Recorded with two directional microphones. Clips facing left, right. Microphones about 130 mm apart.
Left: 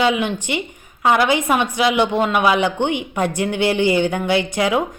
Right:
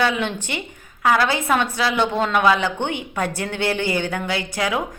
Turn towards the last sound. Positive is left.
turn(degrees=20)  # may be behind; listen again after turning